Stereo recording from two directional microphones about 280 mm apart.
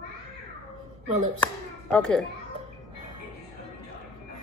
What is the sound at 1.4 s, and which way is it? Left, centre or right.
Speech, centre.